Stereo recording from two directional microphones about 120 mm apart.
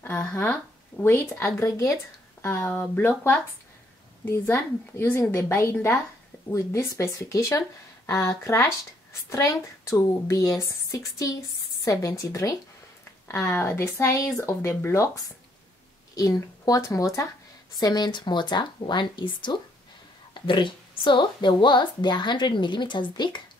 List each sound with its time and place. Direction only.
0.0 s speech: 15° left (ahead or behind)
0.9 s a sound: 15° left (ahead or behind)
1.4 s speech: 25° left (ahead or behind)
2.7 s speech: 15° left (ahead or behind)
16.2 s speech: 30° left (ahead or behind)